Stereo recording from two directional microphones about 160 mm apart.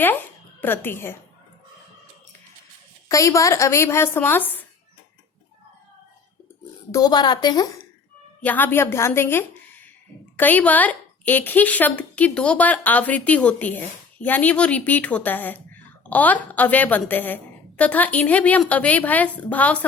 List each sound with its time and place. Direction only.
0.6 s a woman's voice: 15° left (ahead or behind)
3.1 s a woman's voice: 20° left (ahead or behind)
6.9 s a woman's voice: 25° left (ahead or behind)
8.4 s a woman's voice: 10° left (ahead or behind)